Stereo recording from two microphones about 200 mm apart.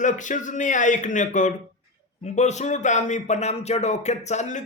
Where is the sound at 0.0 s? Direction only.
40° left (ahead or behind).